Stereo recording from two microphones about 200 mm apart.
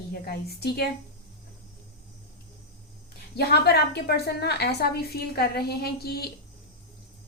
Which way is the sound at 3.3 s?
55° left (ahead or behind).